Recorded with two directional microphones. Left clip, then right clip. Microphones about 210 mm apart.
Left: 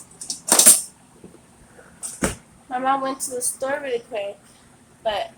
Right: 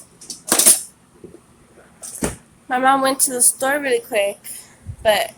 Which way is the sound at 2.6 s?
55° right (ahead or behind).